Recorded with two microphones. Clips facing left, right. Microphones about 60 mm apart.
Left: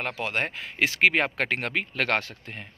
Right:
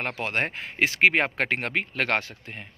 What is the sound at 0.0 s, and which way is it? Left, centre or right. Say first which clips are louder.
Speech: right 1 dB; right.